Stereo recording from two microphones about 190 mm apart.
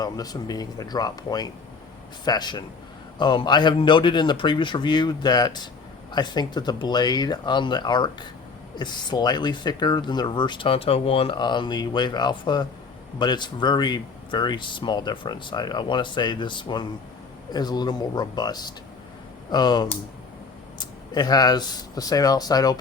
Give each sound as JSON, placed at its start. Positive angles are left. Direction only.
{"t": 0.0, "sound": "speech", "side_deg": 20}